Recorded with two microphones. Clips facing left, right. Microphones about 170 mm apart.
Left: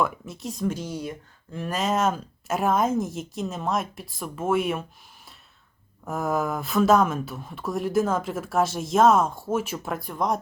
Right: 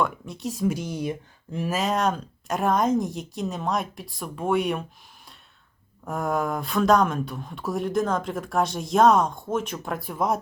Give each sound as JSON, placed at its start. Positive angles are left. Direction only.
{"t": 0.0, "sound": "speech", "side_deg": 0}
{"t": 0.8, "sound": "speech", "side_deg": -20}
{"t": 1.5, "sound": "speech", "side_deg": -5}
{"t": 6.1, "sound": "speech", "side_deg": 0}